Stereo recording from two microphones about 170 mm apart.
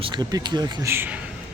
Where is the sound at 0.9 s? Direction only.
10° right (ahead or behind).